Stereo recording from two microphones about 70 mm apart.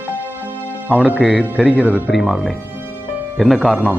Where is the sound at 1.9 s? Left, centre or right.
Left.